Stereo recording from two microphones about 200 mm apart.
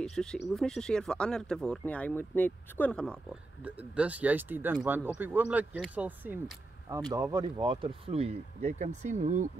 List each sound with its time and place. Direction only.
0.0 s speech: 5° left (ahead or behind)
3.6 s speech: 5° right (ahead or behind)
7.1 s speech: 20° right (ahead or behind); by 9.5 s 35° right (ahead or behind)